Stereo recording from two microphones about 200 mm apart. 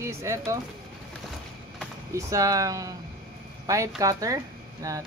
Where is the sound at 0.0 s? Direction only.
15° right (ahead or behind).